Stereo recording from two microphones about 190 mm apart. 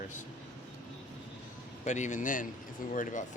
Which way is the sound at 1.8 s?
40° left (ahead or behind).